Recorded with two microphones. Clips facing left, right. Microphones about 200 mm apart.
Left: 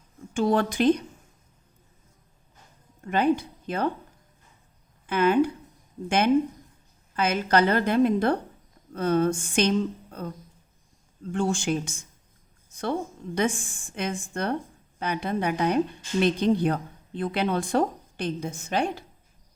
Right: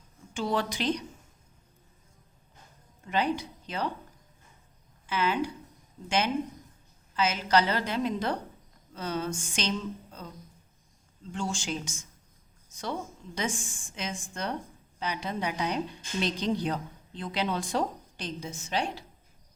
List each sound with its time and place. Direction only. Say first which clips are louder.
0.3 s speech: left 7 dB; 50° left (ahead or behind)
3.0 s speech: left 6 dB; 55° left (ahead or behind)
5.0 s a woman's voice: left 8 dB; 55° left (ahead or behind)